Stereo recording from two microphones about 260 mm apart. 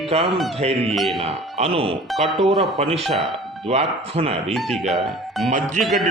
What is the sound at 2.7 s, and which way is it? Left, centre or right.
A man's voice, right.